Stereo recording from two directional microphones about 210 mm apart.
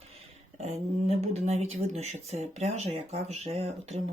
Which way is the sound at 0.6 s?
30° right (ahead or behind).